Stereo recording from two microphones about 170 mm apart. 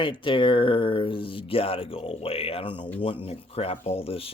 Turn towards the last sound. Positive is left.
turn(degrees=35)  # may be behind; listen again after turning